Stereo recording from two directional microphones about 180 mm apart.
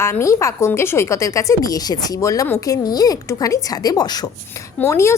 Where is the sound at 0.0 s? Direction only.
15° left (ahead or behind).